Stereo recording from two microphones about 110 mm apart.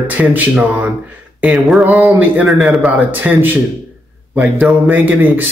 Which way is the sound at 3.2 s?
15° right (ahead or behind).